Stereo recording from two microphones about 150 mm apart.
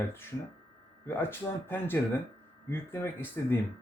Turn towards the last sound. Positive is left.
turn(degrees=15)  # may be behind; listen again after turning